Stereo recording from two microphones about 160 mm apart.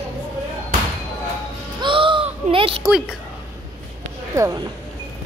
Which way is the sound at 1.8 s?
30° right (ahead or behind).